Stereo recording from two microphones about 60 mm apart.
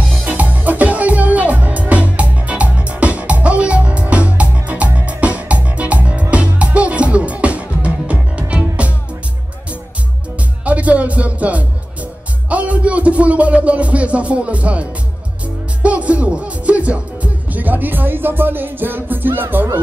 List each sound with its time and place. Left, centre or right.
0.2 s music: right
10.6 s music: right